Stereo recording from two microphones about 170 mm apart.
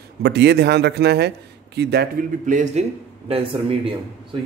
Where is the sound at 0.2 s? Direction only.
80° right.